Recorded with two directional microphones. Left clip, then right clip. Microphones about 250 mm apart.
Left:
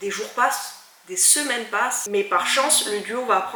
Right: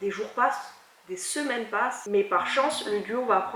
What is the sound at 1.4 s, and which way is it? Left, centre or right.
Speech, centre.